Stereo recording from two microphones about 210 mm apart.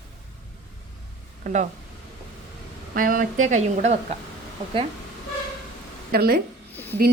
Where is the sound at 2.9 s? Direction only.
40° right (ahead or behind).